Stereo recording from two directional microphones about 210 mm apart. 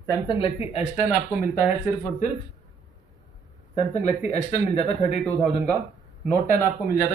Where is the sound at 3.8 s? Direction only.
35° left (ahead or behind).